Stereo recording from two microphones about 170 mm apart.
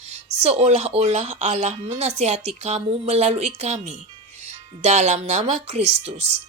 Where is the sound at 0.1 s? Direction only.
40° right (ahead or behind).